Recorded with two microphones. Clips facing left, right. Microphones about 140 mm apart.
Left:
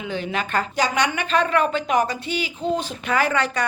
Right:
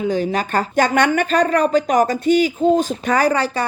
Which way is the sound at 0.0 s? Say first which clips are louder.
Right 7 dB; 40° right (ahead or behind).